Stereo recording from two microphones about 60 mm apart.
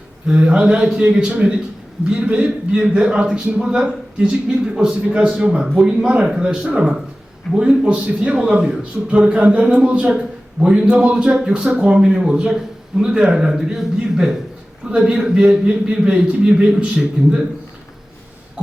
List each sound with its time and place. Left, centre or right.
0.3 s a man's voice: centre
1.0 s a man's voice: right